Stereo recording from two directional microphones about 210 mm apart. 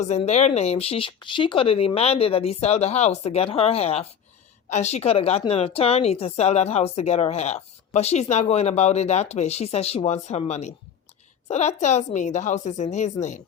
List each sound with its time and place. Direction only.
0.0 s a woman's voice: 35° left (ahead or behind)